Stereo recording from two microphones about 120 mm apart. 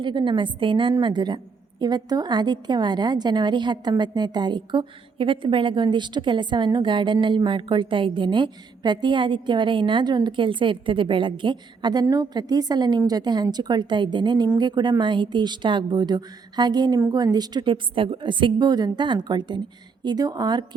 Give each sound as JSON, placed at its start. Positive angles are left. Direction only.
{"t": 0.0, "sound": "a woman's voice", "side_deg": -40}